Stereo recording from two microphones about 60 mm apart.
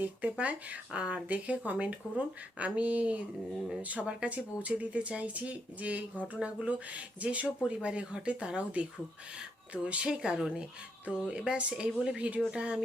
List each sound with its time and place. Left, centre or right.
0.0 s speech: right